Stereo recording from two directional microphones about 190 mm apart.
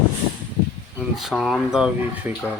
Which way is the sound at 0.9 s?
Centre (ahead or behind).